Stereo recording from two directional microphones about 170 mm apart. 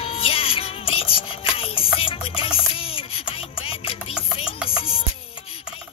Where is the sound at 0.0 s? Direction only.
35° left (ahead or behind).